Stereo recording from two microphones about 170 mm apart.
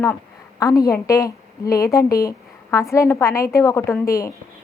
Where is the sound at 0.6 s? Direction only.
20° left (ahead or behind).